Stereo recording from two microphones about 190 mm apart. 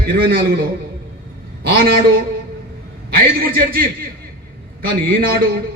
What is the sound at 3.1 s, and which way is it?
Speech, 50° right (ahead or behind).